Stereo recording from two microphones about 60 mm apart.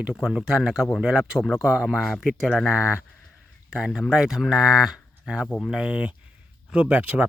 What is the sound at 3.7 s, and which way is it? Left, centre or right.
Speech, centre.